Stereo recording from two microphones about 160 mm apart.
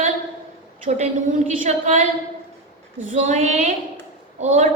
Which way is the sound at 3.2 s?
45° right (ahead or behind).